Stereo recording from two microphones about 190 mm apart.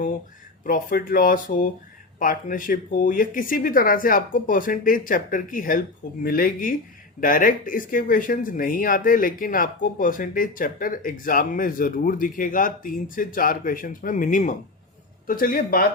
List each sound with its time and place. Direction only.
0.6 s speech: 45° left (ahead or behind)